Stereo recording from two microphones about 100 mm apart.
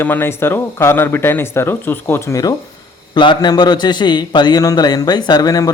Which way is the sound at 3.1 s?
50° left (ahead or behind).